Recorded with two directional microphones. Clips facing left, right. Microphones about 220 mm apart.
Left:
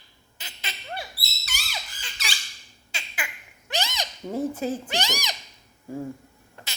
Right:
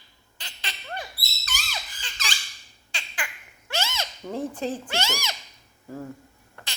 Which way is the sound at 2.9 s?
10° left (ahead or behind).